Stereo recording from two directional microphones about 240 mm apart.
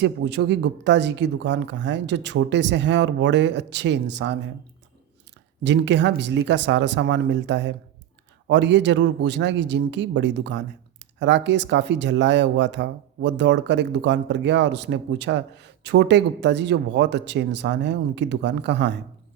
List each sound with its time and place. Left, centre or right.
0.0 s speech: right
5.6 s speech: right